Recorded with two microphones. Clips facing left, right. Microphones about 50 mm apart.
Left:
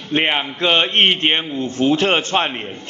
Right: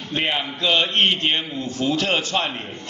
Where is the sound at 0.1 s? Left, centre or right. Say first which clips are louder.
Left 5 dB; left.